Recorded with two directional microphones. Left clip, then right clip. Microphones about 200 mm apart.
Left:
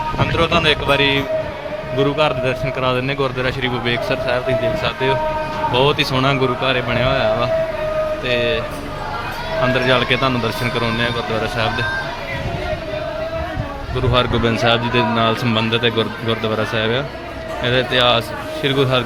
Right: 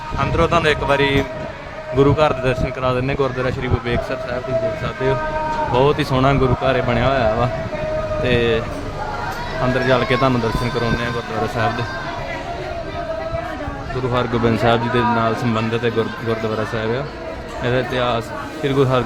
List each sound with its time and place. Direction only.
0.2 s a man's voice: 10° right (ahead or behind)
5.7 s a man's voice: 10° right (ahead or behind)
9.7 s a man's voice: 5° right (ahead or behind)
14.1 s a man's voice: 5° right (ahead or behind)